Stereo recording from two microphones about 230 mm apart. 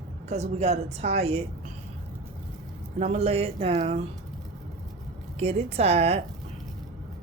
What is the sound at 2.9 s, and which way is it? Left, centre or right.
Speech, right.